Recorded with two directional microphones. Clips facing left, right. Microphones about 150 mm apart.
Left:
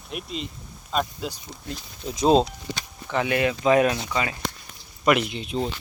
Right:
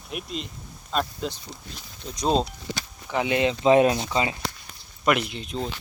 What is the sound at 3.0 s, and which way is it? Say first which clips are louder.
Speech: even; 15° right (ahead or behind).